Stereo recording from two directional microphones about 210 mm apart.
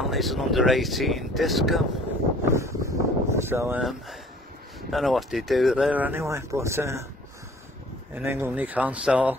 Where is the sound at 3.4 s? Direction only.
10° right (ahead or behind).